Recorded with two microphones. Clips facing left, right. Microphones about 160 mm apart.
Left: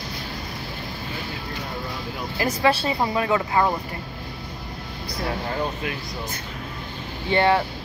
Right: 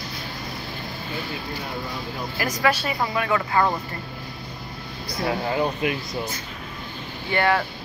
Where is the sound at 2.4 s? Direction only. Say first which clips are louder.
Left 2 dB; 30° left (ahead or behind).